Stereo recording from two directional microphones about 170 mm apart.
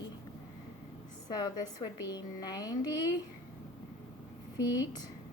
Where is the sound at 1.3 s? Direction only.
20° left (ahead or behind).